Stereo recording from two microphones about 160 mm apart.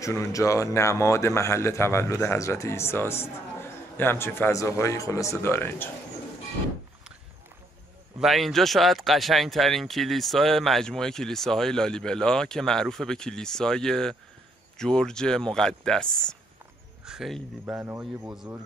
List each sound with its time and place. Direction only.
0.0 s a man's voice: 20° left (ahead or behind)
8.2 s speech: centre (ahead or behind)